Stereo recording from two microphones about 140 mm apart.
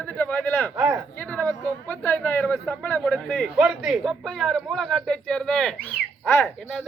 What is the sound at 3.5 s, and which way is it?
A man's voice, 5° right (ahead or behind).